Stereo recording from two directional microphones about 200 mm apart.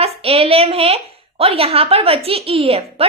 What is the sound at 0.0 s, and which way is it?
A woman's voice, 30° right (ahead or behind).